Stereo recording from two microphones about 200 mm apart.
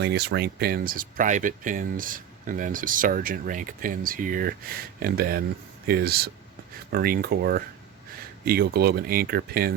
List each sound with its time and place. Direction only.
0.0 s speech: 55° right (ahead or behind)